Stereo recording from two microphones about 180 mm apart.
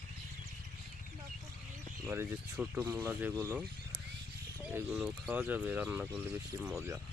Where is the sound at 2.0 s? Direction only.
10° right (ahead or behind).